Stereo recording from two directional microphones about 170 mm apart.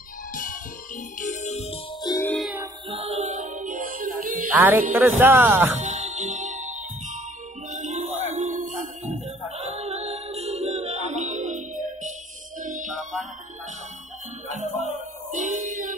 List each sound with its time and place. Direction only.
0.3 s music: 50° left (ahead or behind)
2.2 s music: centre (ahead or behind)
2.9 s music: 35° right (ahead or behind); by 4.5 s 55° right (ahead or behind)
4.5 s music: 10° right (ahead or behind)
4.9 s speech: 10° right (ahead or behind)
5.8 s music: 45° right (ahead or behind)
14.5 s music: 45° right (ahead or behind)